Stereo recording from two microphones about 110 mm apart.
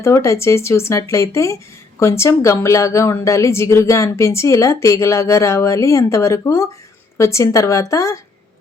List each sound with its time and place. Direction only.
0.0 s a woman's voice: 25° left (ahead or behind)